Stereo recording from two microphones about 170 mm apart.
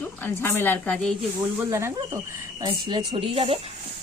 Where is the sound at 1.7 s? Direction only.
15° right (ahead or behind).